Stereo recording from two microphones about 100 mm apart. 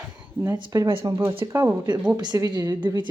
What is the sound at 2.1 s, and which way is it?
Speech, 45° right (ahead or behind).